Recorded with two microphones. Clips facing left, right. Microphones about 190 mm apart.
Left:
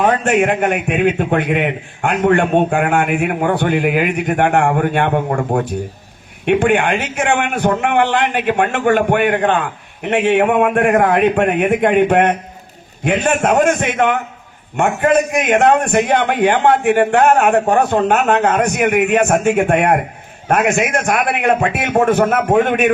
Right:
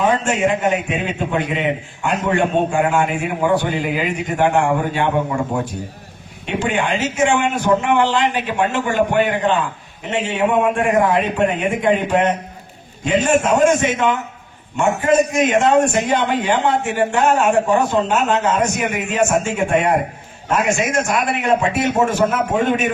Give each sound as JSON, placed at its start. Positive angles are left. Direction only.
{"t": 0.0, "sound": "a man's voice", "side_deg": 60}